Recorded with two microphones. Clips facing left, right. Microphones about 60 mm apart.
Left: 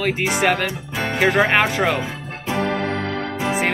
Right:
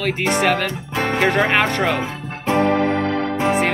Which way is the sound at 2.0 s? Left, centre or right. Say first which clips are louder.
Right 2 dB; right.